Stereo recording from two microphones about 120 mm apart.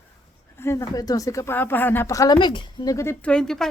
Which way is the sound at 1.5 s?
15° left (ahead or behind).